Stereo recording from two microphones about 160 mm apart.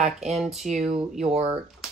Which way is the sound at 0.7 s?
45° right (ahead or behind).